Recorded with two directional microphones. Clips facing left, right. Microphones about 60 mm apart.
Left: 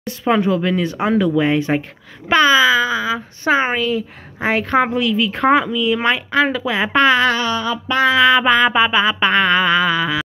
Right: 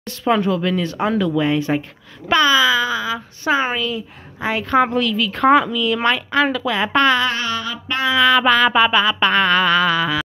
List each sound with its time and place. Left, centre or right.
0.0 s speech: left
4.8 s speech: centre
5.7 s a sound: centre
6.5 s speech: centre
8.1 s speech: left
8.4 s a sound: centre